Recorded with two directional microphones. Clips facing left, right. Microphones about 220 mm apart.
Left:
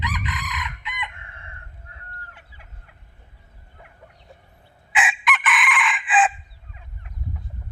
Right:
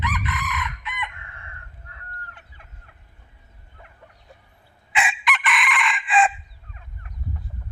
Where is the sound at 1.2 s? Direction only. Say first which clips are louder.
Even; 25° left (ahead or behind).